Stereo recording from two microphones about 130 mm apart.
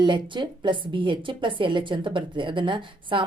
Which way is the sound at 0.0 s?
35° right (ahead or behind).